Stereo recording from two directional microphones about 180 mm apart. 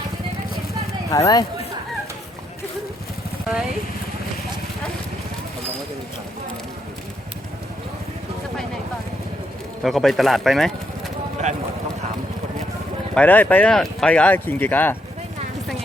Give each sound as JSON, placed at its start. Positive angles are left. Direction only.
{"t": 1.1, "sound": "speech", "side_deg": 20}
{"t": 9.8, "sound": "speech", "side_deg": 0}
{"t": 13.1, "sound": "speech", "side_deg": 10}